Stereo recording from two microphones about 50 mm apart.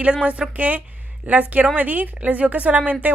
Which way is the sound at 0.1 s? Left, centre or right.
Right.